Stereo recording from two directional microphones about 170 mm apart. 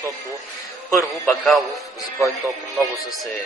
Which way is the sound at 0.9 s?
Centre (ahead or behind).